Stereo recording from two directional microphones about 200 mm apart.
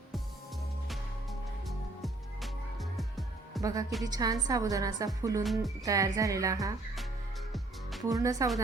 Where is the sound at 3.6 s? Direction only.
15° right (ahead or behind).